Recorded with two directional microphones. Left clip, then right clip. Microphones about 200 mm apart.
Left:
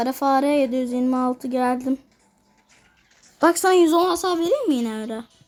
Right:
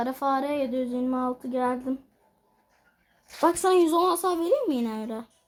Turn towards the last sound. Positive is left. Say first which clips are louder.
# left 4 dB
turn(degrees=50)  # may be behind; listen again after turning